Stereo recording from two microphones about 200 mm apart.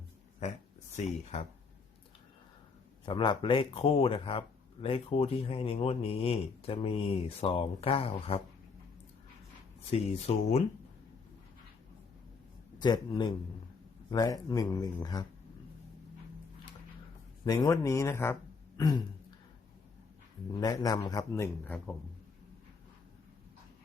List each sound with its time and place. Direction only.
0.9 s speech: 35° left (ahead or behind)
3.1 s speech: 25° left (ahead or behind)
10.3 s speech: 30° left (ahead or behind)
12.8 s speech: 20° left (ahead or behind)
17.4 s speech: 20° left (ahead or behind)
18.8 s a sound: 20° left (ahead or behind)
20.6 s speech: 20° left (ahead or behind)